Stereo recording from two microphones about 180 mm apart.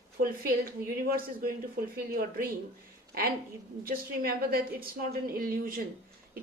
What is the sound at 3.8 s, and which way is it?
A woman's voice, 55° right (ahead or behind).